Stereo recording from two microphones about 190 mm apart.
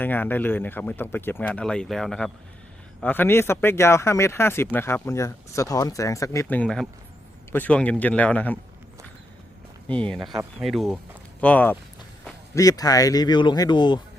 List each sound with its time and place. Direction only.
0.0 s speech: 10° left (ahead or behind)
9.9 s speech: 5° left (ahead or behind); by 14.0 s 25° left (ahead or behind)